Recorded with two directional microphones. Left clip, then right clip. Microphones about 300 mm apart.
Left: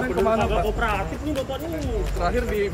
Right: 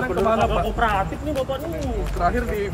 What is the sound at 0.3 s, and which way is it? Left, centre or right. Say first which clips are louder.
Speech: right 2 dB; centre.